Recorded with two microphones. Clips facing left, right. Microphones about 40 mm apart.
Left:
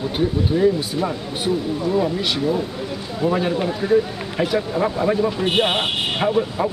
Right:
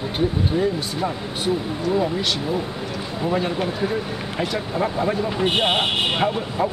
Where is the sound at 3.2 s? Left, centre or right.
Centre.